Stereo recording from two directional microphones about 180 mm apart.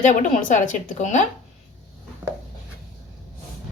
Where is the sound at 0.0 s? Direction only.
40° left (ahead or behind).